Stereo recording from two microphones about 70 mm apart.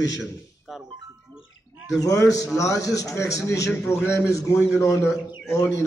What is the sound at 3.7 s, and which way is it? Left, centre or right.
A man's voice, left.